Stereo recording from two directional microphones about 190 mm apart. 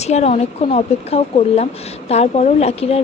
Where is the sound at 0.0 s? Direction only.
35° left (ahead or behind).